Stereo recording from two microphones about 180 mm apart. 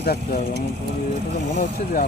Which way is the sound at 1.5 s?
55° left (ahead or behind).